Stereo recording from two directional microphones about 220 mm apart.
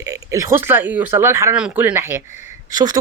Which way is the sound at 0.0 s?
15° right (ahead or behind).